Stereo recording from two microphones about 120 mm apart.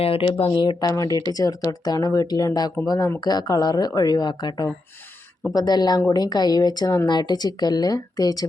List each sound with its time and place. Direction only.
0.0 s speech: 50° left (ahead or behind)
0.5 s speech: 40° left (ahead or behind)